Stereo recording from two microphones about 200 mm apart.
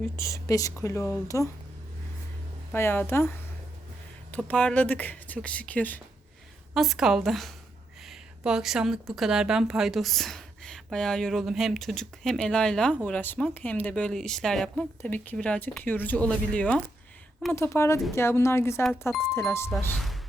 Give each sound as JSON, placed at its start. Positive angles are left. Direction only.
{"t": 0.2, "sound": "speech", "side_deg": 15}
{"t": 2.7, "sound": "speech", "side_deg": 10}
{"t": 19.7, "sound": "speech", "side_deg": 0}